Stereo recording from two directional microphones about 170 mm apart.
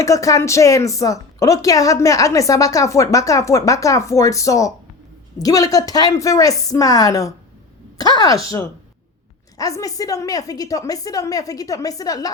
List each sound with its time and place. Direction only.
0.0 s a woman's voice: 20° left (ahead or behind)
9.6 s a woman's voice: 20° left (ahead or behind)